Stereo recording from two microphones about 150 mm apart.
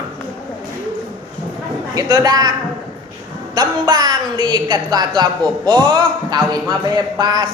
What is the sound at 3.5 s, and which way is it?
A woman's voice, 25° right (ahead or behind).